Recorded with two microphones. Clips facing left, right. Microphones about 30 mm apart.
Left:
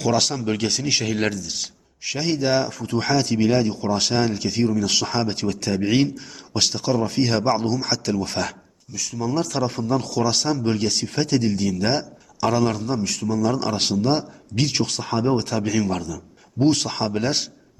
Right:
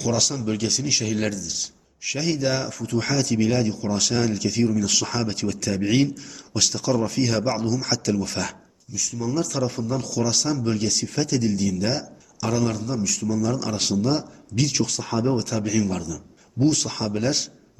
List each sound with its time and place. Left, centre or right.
0.0 s speech: left
2.0 s a man's voice: left
15.0 s speech: left